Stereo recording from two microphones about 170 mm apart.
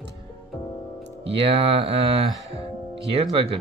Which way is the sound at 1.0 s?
35° right (ahead or behind).